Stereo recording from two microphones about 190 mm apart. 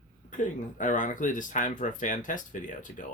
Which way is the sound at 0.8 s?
45° left (ahead or behind).